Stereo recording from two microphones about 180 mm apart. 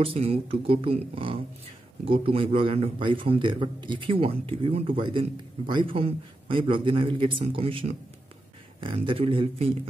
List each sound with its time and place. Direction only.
0.0 s a man's voice: 30° right (ahead or behind)